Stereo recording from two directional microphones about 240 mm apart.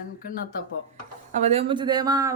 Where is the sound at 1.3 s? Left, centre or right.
Right.